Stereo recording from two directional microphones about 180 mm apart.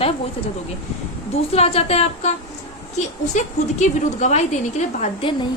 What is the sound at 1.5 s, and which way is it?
A woman's voice, 35° left (ahead or behind).